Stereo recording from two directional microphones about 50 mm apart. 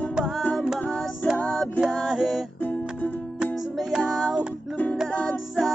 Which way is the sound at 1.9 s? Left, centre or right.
Centre.